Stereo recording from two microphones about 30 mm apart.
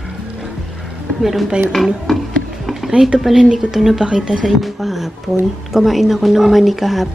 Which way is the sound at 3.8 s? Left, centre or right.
Centre.